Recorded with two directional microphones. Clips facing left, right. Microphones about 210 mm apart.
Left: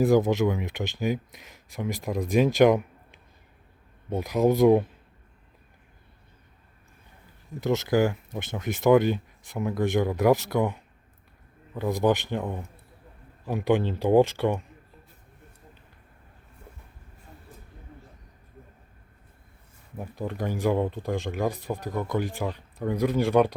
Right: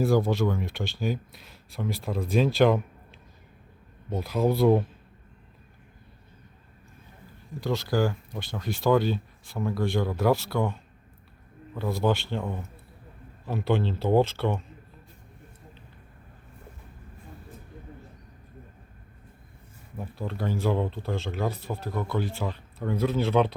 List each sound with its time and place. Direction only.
0.1 s speech: 20° left (ahead or behind)
4.1 s speech: 15° left (ahead or behind)
7.6 s speech: 20° left (ahead or behind)
20.0 s speech: 15° left (ahead or behind)